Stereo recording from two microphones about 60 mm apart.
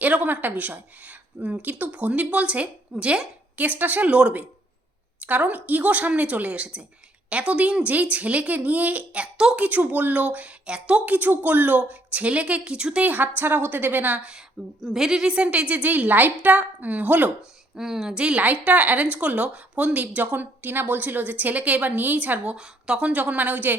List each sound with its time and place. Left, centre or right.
0.0 s speech: right
9.6 s speech: right
13.1 s a woman's voice: right
14.2 s a woman's voice: centre
17.7 s speech: centre; by 22.5 s right
22.5 s speech: centre; by 23.7 s right